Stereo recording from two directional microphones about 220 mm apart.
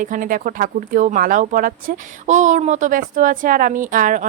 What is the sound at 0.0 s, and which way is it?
A woman's voice, 35° right (ahead or behind).